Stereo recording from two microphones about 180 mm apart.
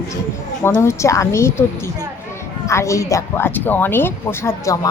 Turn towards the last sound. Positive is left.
turn(degrees=15)  # may be behind; listen again after turning